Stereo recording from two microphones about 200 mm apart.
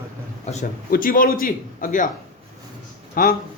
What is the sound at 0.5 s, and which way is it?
Speech, 40° left (ahead or behind).